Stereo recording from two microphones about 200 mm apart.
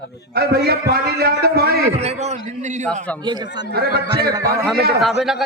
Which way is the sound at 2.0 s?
35° right (ahead or behind).